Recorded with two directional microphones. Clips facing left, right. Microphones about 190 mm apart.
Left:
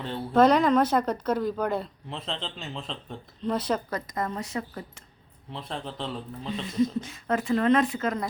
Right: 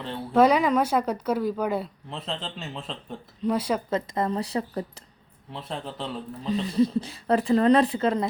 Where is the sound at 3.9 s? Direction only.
25° right (ahead or behind).